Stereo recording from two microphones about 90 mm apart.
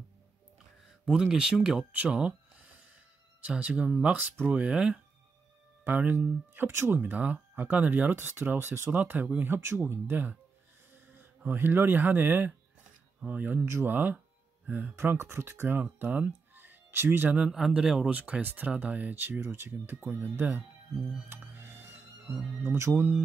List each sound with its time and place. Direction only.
1.0 s speech: 10° right (ahead or behind)
2.0 s a sound: 10° right (ahead or behind)
3.4 s speech: 15° right (ahead or behind)
17.5 s speech: 5° right (ahead or behind); by 20.6 s 20° right (ahead or behind)
21.3 s music: 25° right (ahead or behind)
22.6 s speech: 25° right (ahead or behind)